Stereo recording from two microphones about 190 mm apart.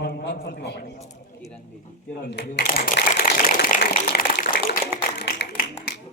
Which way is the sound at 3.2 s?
50° left (ahead or behind).